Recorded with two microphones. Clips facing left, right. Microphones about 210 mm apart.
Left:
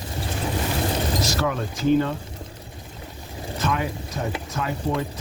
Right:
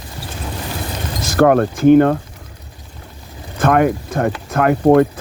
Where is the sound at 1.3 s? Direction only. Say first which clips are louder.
Right 13 dB; 60° right (ahead or behind).